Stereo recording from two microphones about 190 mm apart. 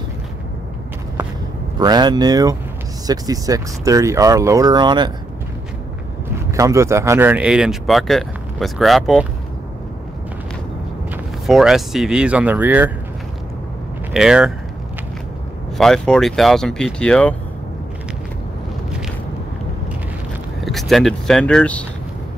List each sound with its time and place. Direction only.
1.8 s speech: 20° right (ahead or behind)
6.5 s speech: 15° right (ahead or behind); by 9.3 s centre (ahead or behind)
11.4 s speech: centre (ahead or behind)
14.1 s speech: 5° right (ahead or behind)
15.8 s speech: centre (ahead or behind)
20.6 s speech: centre (ahead or behind)